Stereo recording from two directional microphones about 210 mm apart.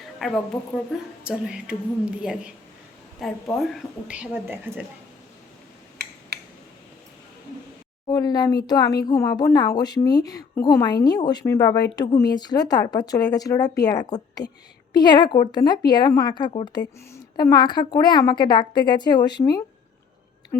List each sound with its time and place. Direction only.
0.2 s a woman's voice: centre (ahead or behind)
6.3 s a sound: 50° right (ahead or behind)
8.0 s speech: 20° left (ahead or behind)